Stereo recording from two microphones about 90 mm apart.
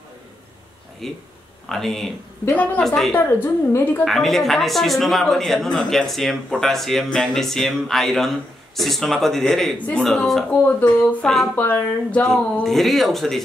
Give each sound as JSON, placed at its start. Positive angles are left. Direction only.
{"t": 1.0, "sound": "speech", "side_deg": 0}
{"t": 2.5, "sound": "speech", "side_deg": 15}
{"t": 2.8, "sound": "speech", "side_deg": 5}
{"t": 3.2, "sound": "a woman's voice", "side_deg": 25}
{"t": 4.0, "sound": "speech", "side_deg": 5}
{"t": 10.5, "sound": "a woman's voice", "side_deg": 15}
{"t": 12.6, "sound": "speech", "side_deg": 0}